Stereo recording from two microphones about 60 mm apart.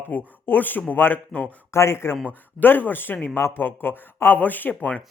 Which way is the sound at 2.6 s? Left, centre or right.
Left.